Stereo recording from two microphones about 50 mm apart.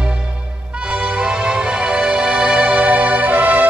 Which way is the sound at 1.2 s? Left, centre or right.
Centre.